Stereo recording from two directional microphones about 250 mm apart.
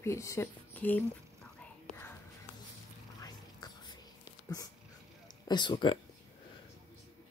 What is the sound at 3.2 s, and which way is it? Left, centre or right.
Whispering, centre.